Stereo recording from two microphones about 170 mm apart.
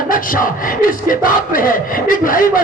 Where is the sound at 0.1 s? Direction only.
55° left (ahead or behind).